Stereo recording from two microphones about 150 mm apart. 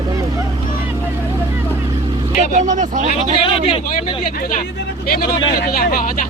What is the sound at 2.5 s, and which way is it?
Speech, 55° right (ahead or behind).